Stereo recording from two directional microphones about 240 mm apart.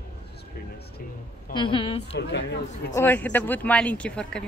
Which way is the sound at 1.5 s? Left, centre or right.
Centre.